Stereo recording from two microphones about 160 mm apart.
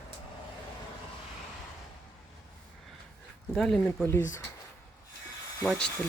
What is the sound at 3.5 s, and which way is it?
Speech, centre (ahead or behind).